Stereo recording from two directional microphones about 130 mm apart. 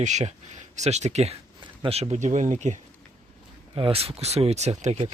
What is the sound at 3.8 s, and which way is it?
Speech, 45° right (ahead or behind).